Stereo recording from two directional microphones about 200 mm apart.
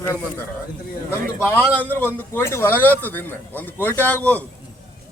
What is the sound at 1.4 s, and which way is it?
A man's voice, 10° left (ahead or behind).